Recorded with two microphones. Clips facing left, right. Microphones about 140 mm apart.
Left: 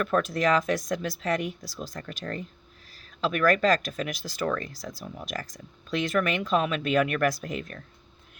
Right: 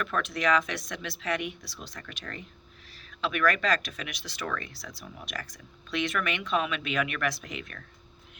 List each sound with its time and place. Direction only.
0.0 s speech: 40° left (ahead or behind)